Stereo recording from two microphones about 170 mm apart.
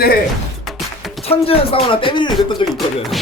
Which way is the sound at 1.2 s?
35° left (ahead or behind).